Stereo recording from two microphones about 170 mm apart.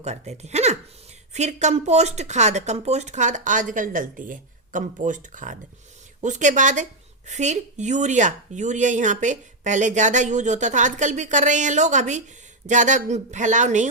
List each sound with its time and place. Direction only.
0.0 s speech: 40° right (ahead or behind)